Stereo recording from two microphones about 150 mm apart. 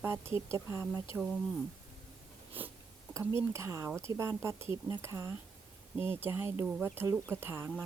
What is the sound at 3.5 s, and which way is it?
Speech, 20° right (ahead or behind).